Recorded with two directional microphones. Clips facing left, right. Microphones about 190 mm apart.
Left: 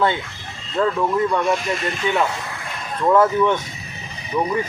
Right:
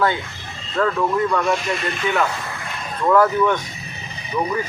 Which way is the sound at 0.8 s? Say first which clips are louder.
Even; 15° left (ahead or behind).